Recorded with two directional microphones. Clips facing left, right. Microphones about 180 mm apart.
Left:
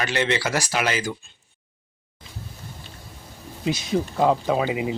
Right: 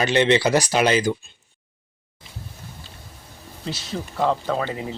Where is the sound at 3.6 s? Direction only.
10° left (ahead or behind).